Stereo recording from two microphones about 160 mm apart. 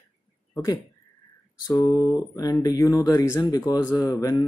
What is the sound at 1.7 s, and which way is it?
A man's voice, 20° left (ahead or behind).